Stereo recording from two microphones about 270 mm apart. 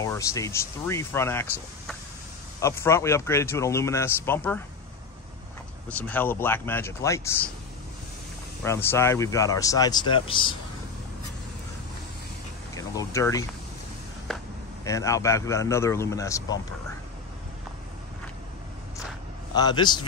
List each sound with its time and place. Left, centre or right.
0.0 s speech: centre
5.9 s speech: centre
8.6 s speech: centre
12.7 s speech: centre
14.9 s speech: centre
19.5 s speech: centre